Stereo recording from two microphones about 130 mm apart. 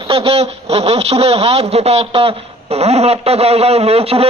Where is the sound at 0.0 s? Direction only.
45° right (ahead or behind).